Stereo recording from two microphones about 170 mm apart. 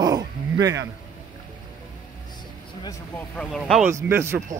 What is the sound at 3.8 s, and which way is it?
Speech, 15° right (ahead or behind).